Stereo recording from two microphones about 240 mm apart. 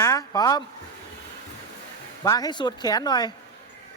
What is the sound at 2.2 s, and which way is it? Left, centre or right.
Speech, centre.